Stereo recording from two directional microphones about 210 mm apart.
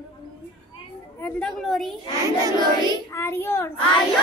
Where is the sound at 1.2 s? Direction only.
5° left (ahead or behind).